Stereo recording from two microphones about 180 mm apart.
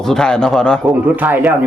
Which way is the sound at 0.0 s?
5° left (ahead or behind).